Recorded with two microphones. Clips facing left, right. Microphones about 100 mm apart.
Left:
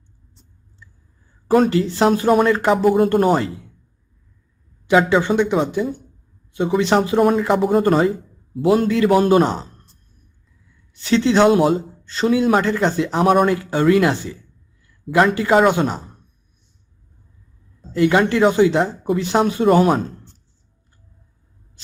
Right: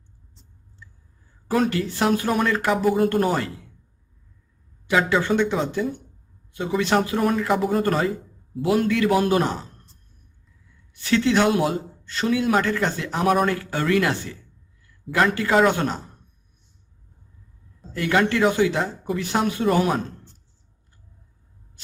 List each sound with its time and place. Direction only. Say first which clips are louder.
1.5 s speech: left 7 dB; 35° left (ahead or behind)
1.7 s speech: left 5 dB; 25° left (ahead or behind)
4.9 s speech: left 5 dB; 25° left (ahead or behind)
11.0 s speech: left 5 dB; 25° left (ahead or behind)
17.9 s speech: left 5 dB; 20° left (ahead or behind)